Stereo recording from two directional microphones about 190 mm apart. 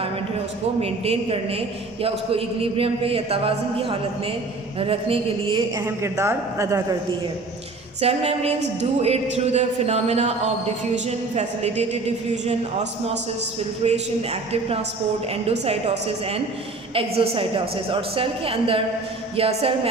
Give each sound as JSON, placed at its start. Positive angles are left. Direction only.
{"t": 0.8, "sound": "a man's voice", "side_deg": -30}
{"t": 8.0, "sound": "a man's voice", "side_deg": -35}
{"t": 13.8, "sound": "a man's voice", "side_deg": -35}